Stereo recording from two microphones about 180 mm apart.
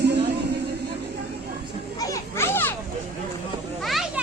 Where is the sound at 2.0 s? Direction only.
15° left (ahead or behind).